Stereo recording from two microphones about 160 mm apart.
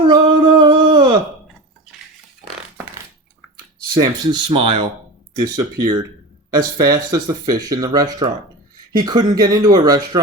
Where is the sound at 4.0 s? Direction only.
30° right (ahead or behind).